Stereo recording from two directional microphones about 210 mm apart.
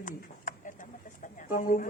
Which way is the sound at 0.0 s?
40° left (ahead or behind).